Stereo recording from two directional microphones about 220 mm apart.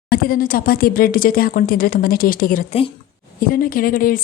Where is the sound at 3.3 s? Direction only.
40° left (ahead or behind).